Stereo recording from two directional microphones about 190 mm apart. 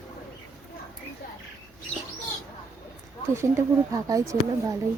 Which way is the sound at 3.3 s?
15° right (ahead or behind).